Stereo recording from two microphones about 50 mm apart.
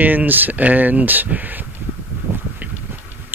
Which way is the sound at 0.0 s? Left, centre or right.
Right.